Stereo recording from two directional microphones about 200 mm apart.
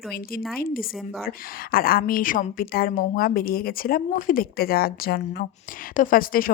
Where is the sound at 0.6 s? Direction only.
45° left (ahead or behind).